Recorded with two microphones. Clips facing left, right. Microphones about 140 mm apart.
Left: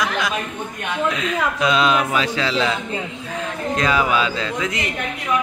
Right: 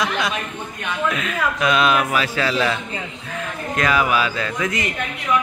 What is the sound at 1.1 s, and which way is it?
A man's voice, 20° left (ahead or behind).